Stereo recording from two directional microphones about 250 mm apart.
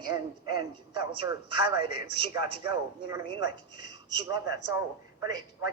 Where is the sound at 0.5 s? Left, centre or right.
Centre.